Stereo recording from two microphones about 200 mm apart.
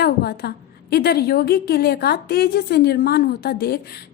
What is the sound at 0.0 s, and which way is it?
A woman's voice, 55° left (ahead or behind).